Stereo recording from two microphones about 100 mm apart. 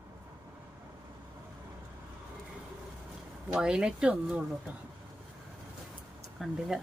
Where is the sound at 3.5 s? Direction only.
5° right (ahead or behind).